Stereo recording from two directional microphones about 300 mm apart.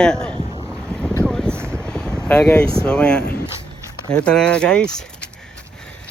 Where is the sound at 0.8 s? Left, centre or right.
Centre.